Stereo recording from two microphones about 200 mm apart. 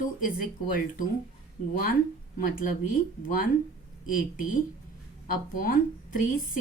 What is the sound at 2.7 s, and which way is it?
Speech, 45° left (ahead or behind).